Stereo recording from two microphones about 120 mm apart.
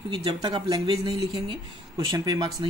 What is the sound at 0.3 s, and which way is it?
Speech, 35° right (ahead or behind).